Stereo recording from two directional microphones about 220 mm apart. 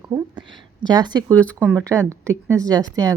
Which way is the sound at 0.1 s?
20° right (ahead or behind).